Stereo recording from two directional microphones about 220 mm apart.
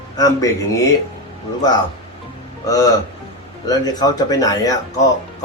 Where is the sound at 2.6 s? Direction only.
15° left (ahead or behind).